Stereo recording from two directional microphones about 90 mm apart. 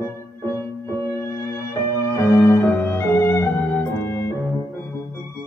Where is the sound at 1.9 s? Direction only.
30° left (ahead or behind).